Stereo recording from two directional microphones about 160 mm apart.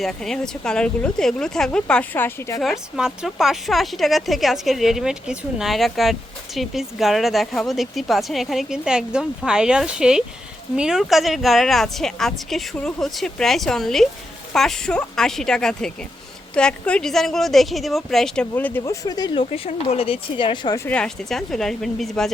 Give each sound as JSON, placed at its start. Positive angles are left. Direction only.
{"t": 0.0, "sound": "speech", "side_deg": 5}
{"t": 2.6, "sound": "speech", "side_deg": 0}
{"t": 19.0, "sound": "speech", "side_deg": 25}
{"t": 20.8, "sound": "speech", "side_deg": 5}